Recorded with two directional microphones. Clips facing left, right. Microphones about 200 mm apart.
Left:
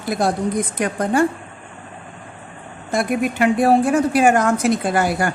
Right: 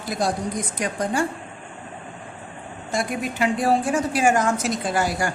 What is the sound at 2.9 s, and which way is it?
A woman's voice, 55° left (ahead or behind).